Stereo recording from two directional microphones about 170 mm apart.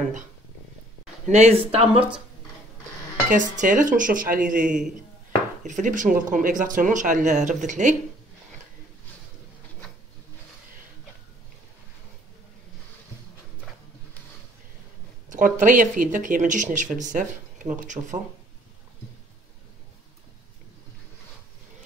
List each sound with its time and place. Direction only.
1.3 s speech: 40° right (ahead or behind)
2.0 s speech: 5° right (ahead or behind)
3.3 s speech: 50° right (ahead or behind)
15.2 s speech: 50° right (ahead or behind)
18.0 s speech: 30° right (ahead or behind)